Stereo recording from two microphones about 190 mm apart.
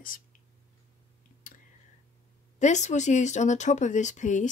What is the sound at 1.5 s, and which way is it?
Whispering, 45° left (ahead or behind).